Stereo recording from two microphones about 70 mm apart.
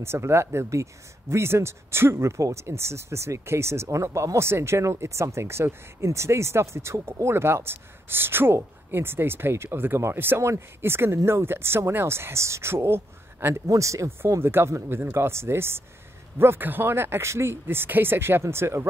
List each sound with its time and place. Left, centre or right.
0.0 s speech: right
13.7 s speech: right